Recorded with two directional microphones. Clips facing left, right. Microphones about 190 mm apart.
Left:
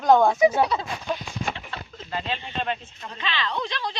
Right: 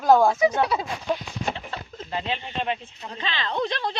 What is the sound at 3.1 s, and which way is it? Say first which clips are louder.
Speech: even; 40° right (ahead or behind).